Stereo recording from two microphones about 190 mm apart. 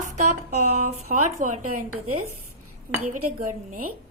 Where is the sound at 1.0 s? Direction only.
40° right (ahead or behind).